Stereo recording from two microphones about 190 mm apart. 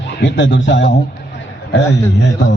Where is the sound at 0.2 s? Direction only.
70° left (ahead or behind).